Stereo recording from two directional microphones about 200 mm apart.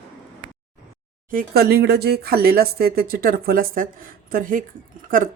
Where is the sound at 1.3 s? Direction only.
50° right (ahead or behind).